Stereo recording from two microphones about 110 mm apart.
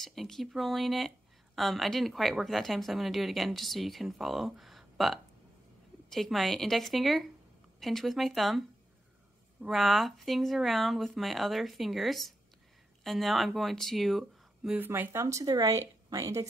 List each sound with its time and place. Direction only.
0.0 s speech: 5° left (ahead or behind)
14.8 s speech: 20° right (ahead or behind)